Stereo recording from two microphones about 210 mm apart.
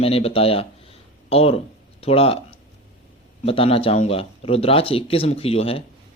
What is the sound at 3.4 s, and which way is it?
Speech, 25° left (ahead or behind).